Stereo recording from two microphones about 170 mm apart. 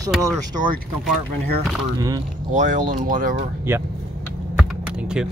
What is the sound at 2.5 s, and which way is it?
Speech, 50° right (ahead or behind).